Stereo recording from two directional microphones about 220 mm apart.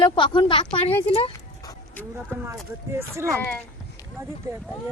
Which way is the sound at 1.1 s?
25° left (ahead or behind).